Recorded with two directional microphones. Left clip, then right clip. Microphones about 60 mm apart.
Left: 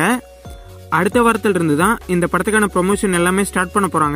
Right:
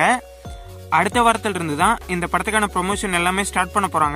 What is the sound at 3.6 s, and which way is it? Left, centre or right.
Speech, centre.